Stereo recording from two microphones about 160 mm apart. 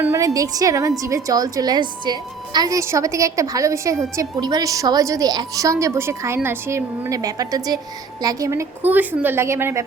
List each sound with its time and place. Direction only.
0.0 s a woman's voice: 20° right (ahead or behind)